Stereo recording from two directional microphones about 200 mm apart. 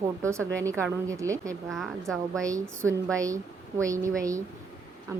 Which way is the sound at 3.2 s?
15° right (ahead or behind).